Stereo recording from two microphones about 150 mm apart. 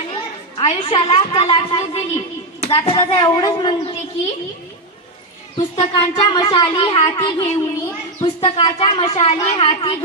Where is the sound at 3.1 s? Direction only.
25° left (ahead or behind).